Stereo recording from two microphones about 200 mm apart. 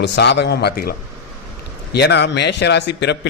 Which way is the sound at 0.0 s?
60° left (ahead or behind).